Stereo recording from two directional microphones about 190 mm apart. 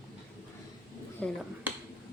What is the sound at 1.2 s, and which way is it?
Speech, 5° left (ahead or behind).